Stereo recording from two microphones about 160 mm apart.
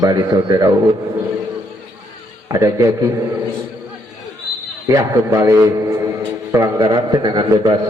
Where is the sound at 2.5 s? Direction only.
20° right (ahead or behind).